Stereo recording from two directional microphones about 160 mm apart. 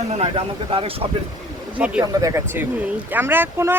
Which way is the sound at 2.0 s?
20° right (ahead or behind).